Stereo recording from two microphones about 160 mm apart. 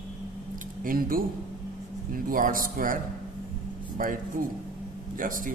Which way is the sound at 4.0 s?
60° right (ahead or behind).